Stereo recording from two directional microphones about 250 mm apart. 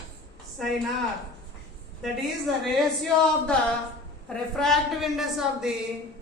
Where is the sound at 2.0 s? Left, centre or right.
Centre.